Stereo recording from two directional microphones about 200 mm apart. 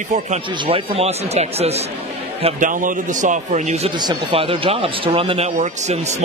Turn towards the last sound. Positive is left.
turn(degrees=-35)  # may be behind; listen again after turning